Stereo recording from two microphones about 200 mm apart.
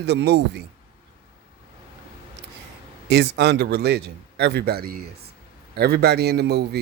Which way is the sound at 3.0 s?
55° right (ahead or behind).